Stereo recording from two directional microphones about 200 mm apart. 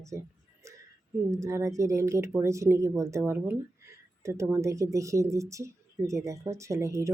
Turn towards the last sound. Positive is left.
turn(degrees=-15)  # may be behind; listen again after turning